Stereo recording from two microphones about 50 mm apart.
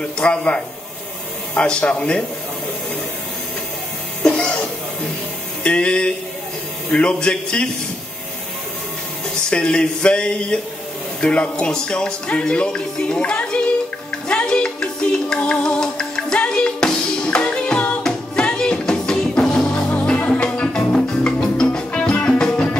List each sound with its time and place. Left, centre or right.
0.2 s speech: left
4.2 s music: centre
5.6 s speech: left
9.5 s speech: centre
14.2 s music: centre